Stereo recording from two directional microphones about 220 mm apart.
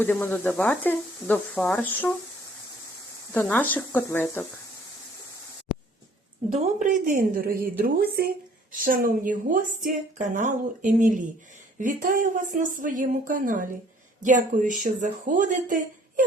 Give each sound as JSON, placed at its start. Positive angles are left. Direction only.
{"t": 0.0, "sound": "speech", "side_deg": 10}
{"t": 3.3, "sound": "speech", "side_deg": 10}
{"t": 6.7, "sound": "a woman's voice", "side_deg": -35}